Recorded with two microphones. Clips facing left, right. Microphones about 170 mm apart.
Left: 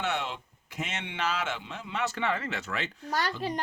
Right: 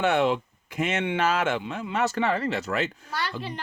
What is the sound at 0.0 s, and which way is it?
Speech, 55° right (ahead or behind).